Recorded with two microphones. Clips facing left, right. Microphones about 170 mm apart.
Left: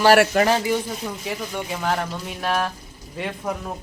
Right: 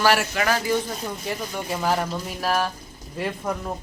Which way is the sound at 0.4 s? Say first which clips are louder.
Left 4 dB; 25° left (ahead or behind).